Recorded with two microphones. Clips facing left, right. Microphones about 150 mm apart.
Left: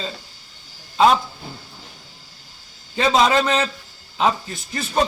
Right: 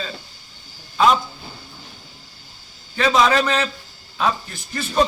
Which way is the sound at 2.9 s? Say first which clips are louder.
Even; 20° left (ahead or behind).